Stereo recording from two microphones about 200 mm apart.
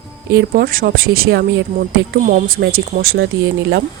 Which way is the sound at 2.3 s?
40° right (ahead or behind).